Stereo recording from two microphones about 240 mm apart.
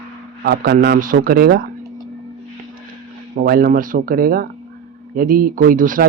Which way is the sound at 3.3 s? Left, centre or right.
Right.